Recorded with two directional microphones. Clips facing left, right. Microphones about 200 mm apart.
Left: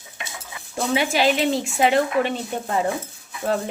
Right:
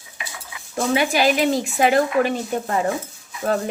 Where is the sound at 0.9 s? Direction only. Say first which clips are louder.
Right 1 dB; 25° left (ahead or behind).